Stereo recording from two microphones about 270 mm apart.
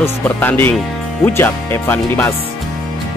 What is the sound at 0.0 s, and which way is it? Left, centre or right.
Speech, centre.